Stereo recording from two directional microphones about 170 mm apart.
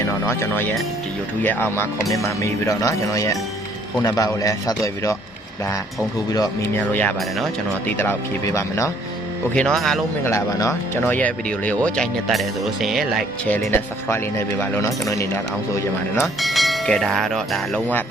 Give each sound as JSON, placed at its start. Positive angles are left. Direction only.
{"t": 0.0, "sound": "a man's voice", "side_deg": 15}
{"t": 6.7, "sound": "speech", "side_deg": 10}
{"t": 8.5, "sound": "speech", "side_deg": 15}
{"t": 9.6, "sound": "speech", "side_deg": 5}
{"t": 10.2, "sound": "speech", "side_deg": 15}
{"t": 13.5, "sound": "speech", "side_deg": 10}
{"t": 16.2, "sound": "speech", "side_deg": 0}